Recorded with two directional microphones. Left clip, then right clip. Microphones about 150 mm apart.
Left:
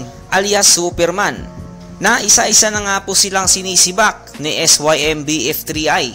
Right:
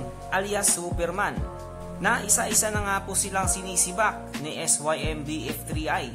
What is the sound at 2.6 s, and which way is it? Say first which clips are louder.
Speech: left 12 dB; 35° left (ahead or behind).